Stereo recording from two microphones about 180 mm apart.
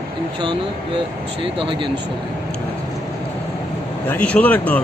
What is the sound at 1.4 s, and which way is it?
Speech, 30° right (ahead or behind).